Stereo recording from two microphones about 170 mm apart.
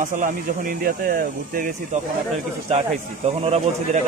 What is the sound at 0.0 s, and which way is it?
A man's voice, 50° right (ahead or behind).